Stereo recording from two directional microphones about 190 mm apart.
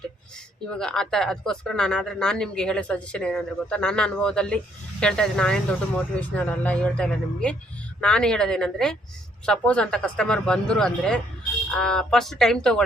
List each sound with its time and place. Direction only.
0.7 s speech: 5° left (ahead or behind)